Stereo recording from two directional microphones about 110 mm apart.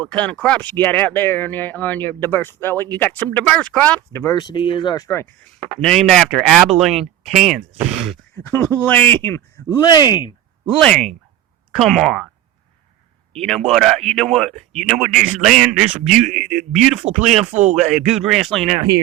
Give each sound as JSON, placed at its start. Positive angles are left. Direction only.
{"t": 0.0, "sound": "speech", "side_deg": 10}
{"t": 4.1, "sound": "speech", "side_deg": 25}
{"t": 4.4, "sound": "speech", "side_deg": 45}
{"t": 5.0, "sound": "speech", "side_deg": 20}
{"t": 5.8, "sound": "speech", "side_deg": 5}
{"t": 8.4, "sound": "speech", "side_deg": 15}
{"t": 9.8, "sound": "speech", "side_deg": 40}
{"t": 10.8, "sound": "speech", "side_deg": 5}
{"t": 13.3, "sound": "speech", "side_deg": 5}